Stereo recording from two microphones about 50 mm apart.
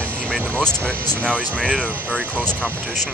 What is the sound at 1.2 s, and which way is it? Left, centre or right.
Speech, left.